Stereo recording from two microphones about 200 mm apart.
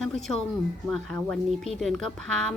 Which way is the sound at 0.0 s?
Centre (ahead or behind).